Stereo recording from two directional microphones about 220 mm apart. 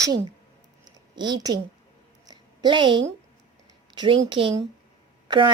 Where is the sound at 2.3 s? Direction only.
20° right (ahead or behind).